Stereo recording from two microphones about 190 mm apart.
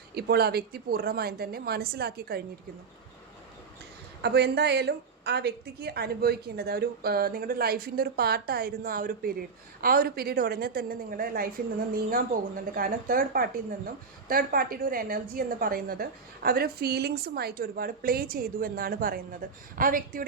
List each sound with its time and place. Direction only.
0.1 s a woman's voice: 55° right (ahead or behind)
4.2 s a woman's voice: 60° right (ahead or behind)